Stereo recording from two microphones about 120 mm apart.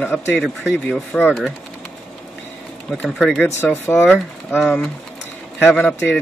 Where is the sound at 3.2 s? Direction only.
15° left (ahead or behind).